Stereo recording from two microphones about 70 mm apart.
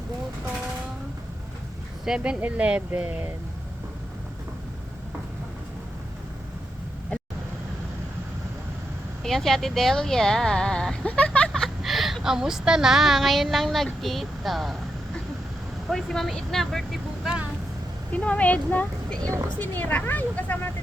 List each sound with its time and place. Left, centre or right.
2.0 s speech: centre
9.2 s speech: centre
11.8 s a woman's voice: centre
15.9 s a woman's voice: centre
18.1 s speech: left